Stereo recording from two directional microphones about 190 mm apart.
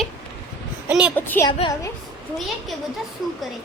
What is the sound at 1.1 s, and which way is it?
Speech, 10° left (ahead or behind).